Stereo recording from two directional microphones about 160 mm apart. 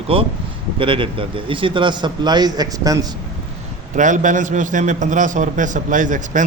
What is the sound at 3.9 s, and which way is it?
A man's voice, 50° right (ahead or behind).